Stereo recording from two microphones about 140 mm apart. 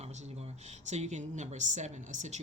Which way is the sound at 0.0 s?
50° right (ahead or behind).